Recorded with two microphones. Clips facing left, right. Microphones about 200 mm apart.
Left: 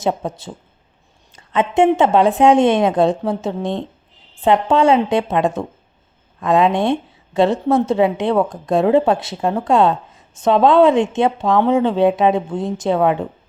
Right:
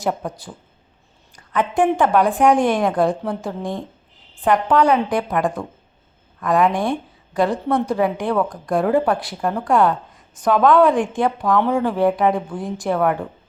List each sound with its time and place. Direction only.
0.0 s a woman's voice: 25° left (ahead or behind)